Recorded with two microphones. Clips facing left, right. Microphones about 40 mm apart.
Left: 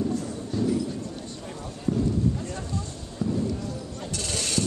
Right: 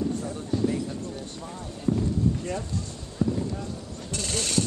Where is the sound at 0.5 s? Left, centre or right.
Centre.